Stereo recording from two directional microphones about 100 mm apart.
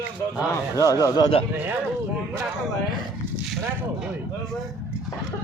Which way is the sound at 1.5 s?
20° right (ahead or behind).